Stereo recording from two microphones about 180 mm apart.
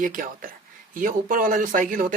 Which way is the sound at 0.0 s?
45° right (ahead or behind).